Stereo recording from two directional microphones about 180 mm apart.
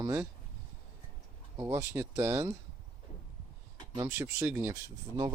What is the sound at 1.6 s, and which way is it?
Speech, 15° right (ahead or behind).